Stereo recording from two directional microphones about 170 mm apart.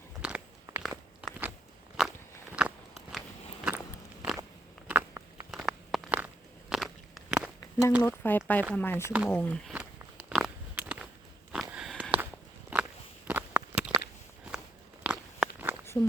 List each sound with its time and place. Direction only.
0.2 s crunch: 5° right (ahead or behind)
2.0 s biting: 5° right (ahead or behind)
4.9 s a sound: 10° right (ahead or behind)
7.6 s a sound: 15° left (ahead or behind)
8.0 s speech: 15° left (ahead or behind)
9.7 s biting: 5° right (ahead or behind)
11.5 s a sound: 5° right (ahead or behind)
12.7 s walk: 10° right (ahead or behind)
13.2 s biting: 10° right (ahead or behind)
15.0 s biting: 5° right (ahead or behind)
15.9 s speech: 10° left (ahead or behind)